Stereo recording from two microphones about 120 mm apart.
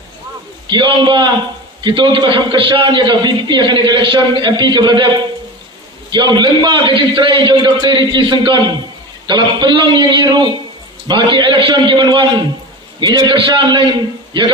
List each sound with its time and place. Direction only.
0.7 s a man's voice: 40° right (ahead or behind)